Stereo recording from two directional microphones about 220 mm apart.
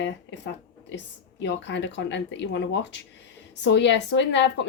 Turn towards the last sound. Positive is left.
turn(degrees=55)  # may be behind; listen again after turning